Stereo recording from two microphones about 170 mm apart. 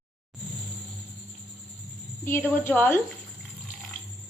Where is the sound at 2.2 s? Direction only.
15° left (ahead or behind).